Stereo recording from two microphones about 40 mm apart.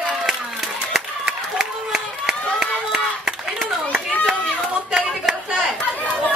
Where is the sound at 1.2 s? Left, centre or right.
Centre.